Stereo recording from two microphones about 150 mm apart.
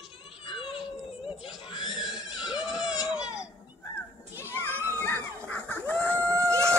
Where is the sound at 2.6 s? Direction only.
5° right (ahead or behind).